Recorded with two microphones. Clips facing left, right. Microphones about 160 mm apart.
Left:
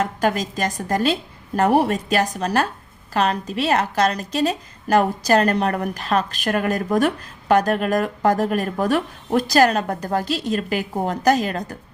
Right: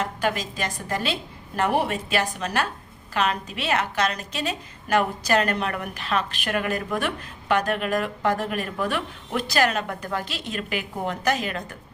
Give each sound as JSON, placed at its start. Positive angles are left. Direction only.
{"t": 0.0, "sound": "a woman's voice", "side_deg": 45}